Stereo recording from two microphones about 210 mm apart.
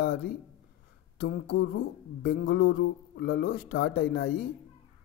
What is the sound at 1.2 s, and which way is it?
A man's voice, 45° left (ahead or behind).